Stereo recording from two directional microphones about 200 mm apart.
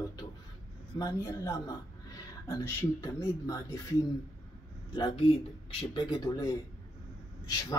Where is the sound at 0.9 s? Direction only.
15° left (ahead or behind).